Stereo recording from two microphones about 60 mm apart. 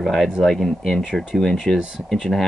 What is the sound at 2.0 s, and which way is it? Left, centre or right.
Speech, centre.